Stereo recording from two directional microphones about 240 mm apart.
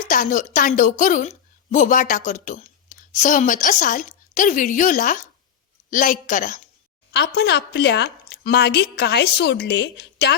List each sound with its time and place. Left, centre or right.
0.1 s a woman's voice: left
7.1 s speech: left